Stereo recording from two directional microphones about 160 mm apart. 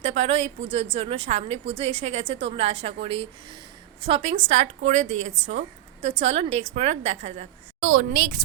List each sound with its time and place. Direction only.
0.0 s a woman's voice: 45° right (ahead or behind)
7.8 s a woman's voice: 60° right (ahead or behind)